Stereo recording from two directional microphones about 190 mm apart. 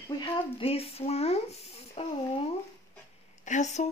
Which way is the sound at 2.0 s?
30° left (ahead or behind).